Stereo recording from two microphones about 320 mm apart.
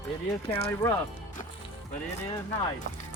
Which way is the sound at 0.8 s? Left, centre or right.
Centre.